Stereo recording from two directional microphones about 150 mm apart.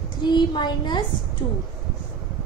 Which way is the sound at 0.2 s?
30° left (ahead or behind).